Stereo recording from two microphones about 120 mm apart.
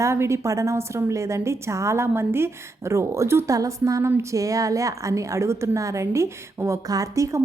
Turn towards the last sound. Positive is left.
turn(degrees=-25)  # may be behind; listen again after turning